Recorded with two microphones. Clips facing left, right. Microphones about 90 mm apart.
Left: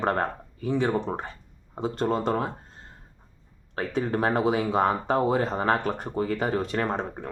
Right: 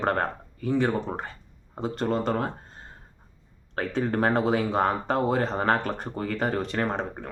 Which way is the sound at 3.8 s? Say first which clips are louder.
Right 1 dB; 15° left (ahead or behind).